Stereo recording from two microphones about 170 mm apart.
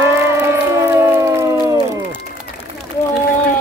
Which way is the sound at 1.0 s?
15° right (ahead or behind).